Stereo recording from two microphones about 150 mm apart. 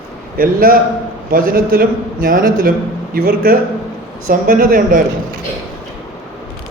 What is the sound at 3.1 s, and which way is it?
Speech, 85° right.